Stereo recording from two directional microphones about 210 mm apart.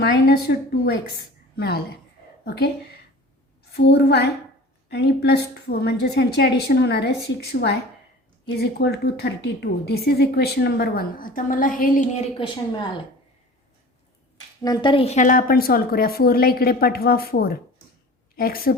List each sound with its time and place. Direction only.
0.0 s a woman's voice: 50° left (ahead or behind)
12.4 s speech: 20° left (ahead or behind)
14.6 s a woman's voice: 20° left (ahead or behind); by 18.7 s 45° left (ahead or behind)